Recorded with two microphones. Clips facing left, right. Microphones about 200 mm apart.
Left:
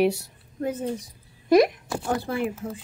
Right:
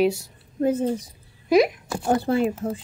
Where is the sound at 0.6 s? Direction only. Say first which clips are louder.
Right 7 dB; 25° right (ahead or behind).